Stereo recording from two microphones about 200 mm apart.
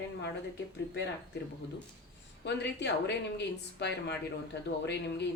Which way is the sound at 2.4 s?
60° left (ahead or behind).